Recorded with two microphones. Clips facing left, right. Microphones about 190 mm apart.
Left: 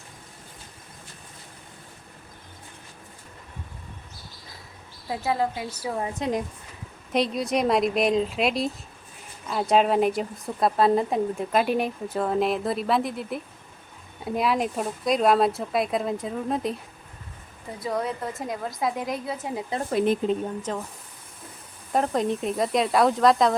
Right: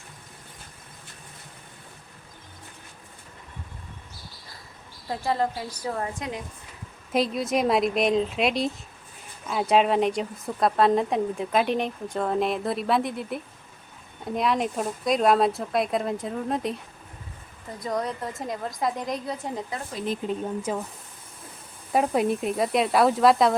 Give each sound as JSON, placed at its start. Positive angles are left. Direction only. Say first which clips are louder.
{"t": 5.0, "sound": "a woman's voice", "louder": "even", "side_deg": 5}
{"t": 7.1, "sound": "speech", "louder": "even", "side_deg": 0}
{"t": 17.7, "sound": "speech", "louder": "left 1 dB", "side_deg": 5}
{"t": 19.9, "sound": "speech", "louder": "left 9 dB", "side_deg": 60}
{"t": 20.6, "sound": "speech", "louder": "right 2 dB", "side_deg": -10}
{"t": 21.9, "sound": "speech", "louder": "right 1 dB", "side_deg": -10}